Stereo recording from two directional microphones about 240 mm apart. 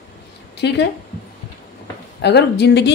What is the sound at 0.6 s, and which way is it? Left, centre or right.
Speech, left.